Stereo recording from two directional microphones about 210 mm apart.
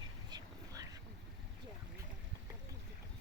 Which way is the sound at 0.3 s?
20° right (ahead or behind).